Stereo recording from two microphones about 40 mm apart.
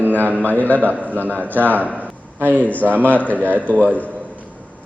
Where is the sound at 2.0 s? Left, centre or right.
Right.